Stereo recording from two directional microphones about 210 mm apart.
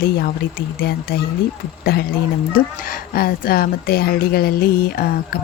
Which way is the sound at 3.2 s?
45° left (ahead or behind).